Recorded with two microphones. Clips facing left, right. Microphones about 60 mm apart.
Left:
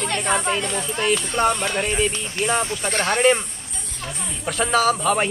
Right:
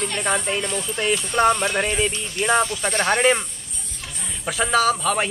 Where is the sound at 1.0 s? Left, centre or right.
Right.